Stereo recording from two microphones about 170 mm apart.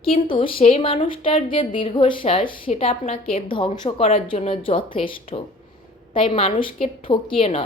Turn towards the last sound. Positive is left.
turn(degrees=30)  # may be behind; listen again after turning